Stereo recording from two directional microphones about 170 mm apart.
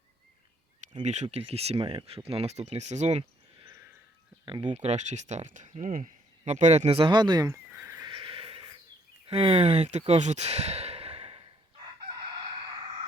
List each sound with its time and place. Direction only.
1.0 s speech: 45° right (ahead or behind); by 8.1 s 15° right (ahead or behind)
8.1 s horse: 30° right (ahead or behind)
9.2 s speech: 35° right (ahead or behind)